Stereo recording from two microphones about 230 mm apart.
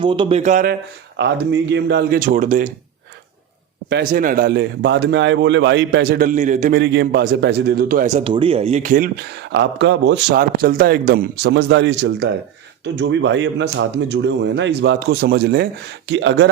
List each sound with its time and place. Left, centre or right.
0.0 s speech: right
3.8 s a man's voice: right
9.5 s a man's voice: right